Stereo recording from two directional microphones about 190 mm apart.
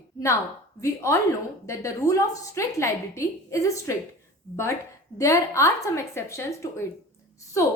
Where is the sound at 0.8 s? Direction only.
15° left (ahead or behind).